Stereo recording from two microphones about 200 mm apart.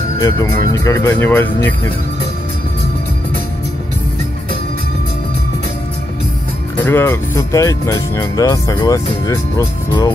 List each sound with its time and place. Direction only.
0.2 s speech: 15° left (ahead or behind)
6.8 s speech: 10° left (ahead or behind)